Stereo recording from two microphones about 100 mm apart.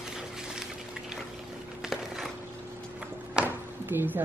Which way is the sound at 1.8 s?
5° right (ahead or behind).